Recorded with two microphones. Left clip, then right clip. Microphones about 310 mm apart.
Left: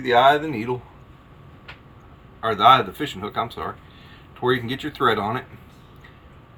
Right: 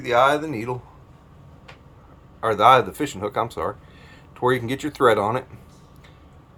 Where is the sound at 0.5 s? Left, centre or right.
Right.